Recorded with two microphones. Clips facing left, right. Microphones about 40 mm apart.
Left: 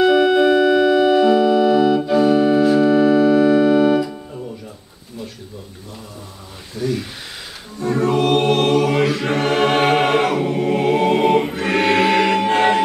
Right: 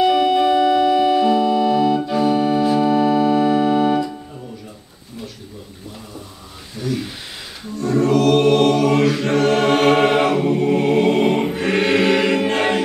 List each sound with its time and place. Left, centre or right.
0.0 s organ: centre
6.8 s a sound: centre
7.8 s music: left
9.1 s choir: centre
12.2 s music: centre
12.4 s music: centre